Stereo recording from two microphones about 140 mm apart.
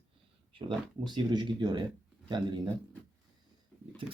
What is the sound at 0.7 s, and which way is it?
Speech, 30° right (ahead or behind).